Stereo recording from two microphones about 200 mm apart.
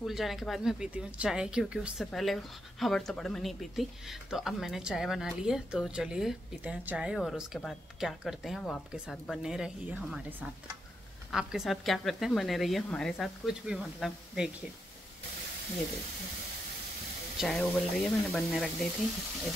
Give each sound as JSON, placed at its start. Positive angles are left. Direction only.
{"t": 0.0, "sound": "speech", "side_deg": 0}
{"t": 17.4, "sound": "speech", "side_deg": 0}